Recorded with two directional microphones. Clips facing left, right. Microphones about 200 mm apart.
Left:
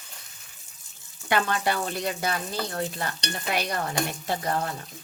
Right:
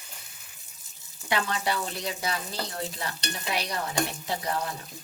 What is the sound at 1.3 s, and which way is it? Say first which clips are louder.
A woman's voice: left 3 dB; 55° left (ahead or behind).